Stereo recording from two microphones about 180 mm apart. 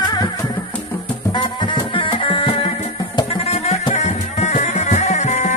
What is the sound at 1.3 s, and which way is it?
Music, 25° left (ahead or behind).